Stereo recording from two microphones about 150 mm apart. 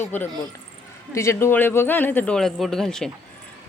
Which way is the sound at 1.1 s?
20° left (ahead or behind).